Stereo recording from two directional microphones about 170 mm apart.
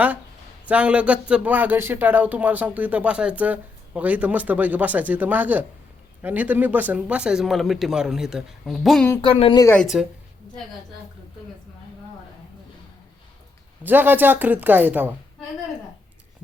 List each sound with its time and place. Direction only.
0.7 s speech: 5° right (ahead or behind)
9.2 s a woman's voice: 30° left (ahead or behind)
9.6 s a woman's voice: 15° left (ahead or behind)
9.8 s speech: 5° right (ahead or behind)
13.8 s speech: 10° right (ahead or behind)